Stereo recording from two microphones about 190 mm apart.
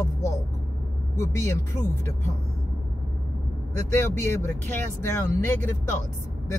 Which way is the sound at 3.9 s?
15° left (ahead or behind).